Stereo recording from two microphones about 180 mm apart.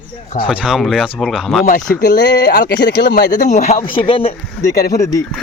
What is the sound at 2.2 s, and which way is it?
Speech, 70° left (ahead or behind).